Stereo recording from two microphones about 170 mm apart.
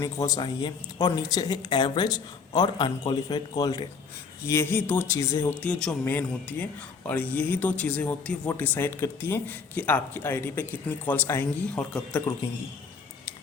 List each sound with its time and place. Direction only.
0.0 s speech: 20° left (ahead or behind)